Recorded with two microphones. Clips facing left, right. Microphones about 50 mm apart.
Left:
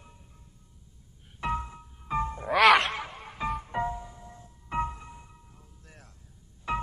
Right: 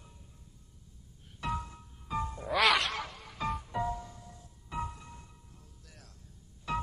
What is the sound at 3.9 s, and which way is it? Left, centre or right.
Music, left.